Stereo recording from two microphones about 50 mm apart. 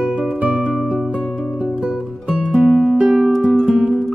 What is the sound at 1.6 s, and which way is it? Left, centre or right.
Music, centre.